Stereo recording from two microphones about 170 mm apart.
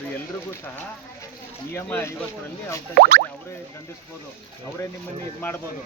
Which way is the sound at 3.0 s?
70° right (ahead or behind).